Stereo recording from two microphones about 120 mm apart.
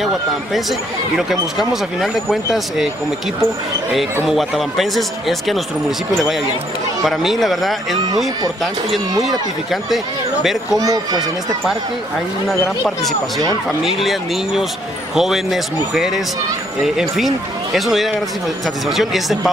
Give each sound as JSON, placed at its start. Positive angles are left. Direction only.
{"t": 1.6, "sound": "speech", "side_deg": 0}
{"t": 3.9, "sound": "speech", "side_deg": 0}
{"t": 9.2, "sound": "speech", "side_deg": 0}
{"t": 10.8, "sound": "speech", "side_deg": -30}
{"t": 13.8, "sound": "speech", "side_deg": 0}
{"t": 15.1, "sound": "speech", "side_deg": -5}